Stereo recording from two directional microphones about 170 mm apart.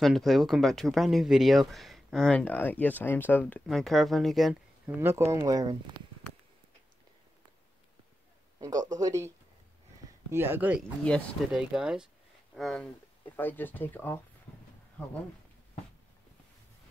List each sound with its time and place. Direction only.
0.0 s speech: centre (ahead or behind)
4.8 s speech: 15° right (ahead or behind)
8.5 s speech: 20° right (ahead or behind)
10.3 s speech: 10° right (ahead or behind)
11.1 s speech: 5° left (ahead or behind)
11.7 s speech: 5° right (ahead or behind); by 14.2 s 10° left (ahead or behind)